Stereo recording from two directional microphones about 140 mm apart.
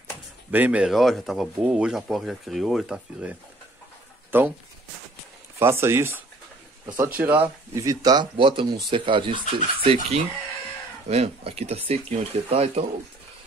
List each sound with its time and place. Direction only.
0.5 s speech: 10° right (ahead or behind)
5.6 s speech: 20° right (ahead or behind)
7.7 s speech: 25° right (ahead or behind)
9.8 s speech: 50° right (ahead or behind)